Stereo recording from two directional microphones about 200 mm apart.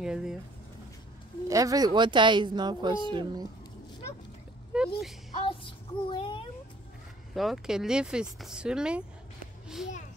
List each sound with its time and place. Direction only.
0.0 s speech: 5° right (ahead or behind)
1.5 s speech: 15° right (ahead or behind)
4.7 s speech: centre (ahead or behind)
5.3 s child singing: 25° left (ahead or behind)
7.3 s speech: centre (ahead or behind)